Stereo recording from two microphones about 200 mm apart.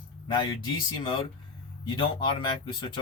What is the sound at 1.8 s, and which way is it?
Speech, 25° left (ahead or behind).